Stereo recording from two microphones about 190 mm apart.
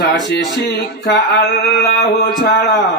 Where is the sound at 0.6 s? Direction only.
55° left (ahead or behind).